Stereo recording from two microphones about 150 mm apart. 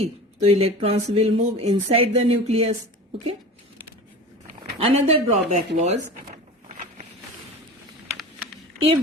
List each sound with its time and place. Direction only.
0.0 s speech: 40° right (ahead or behind)
4.8 s speech: 40° right (ahead or behind)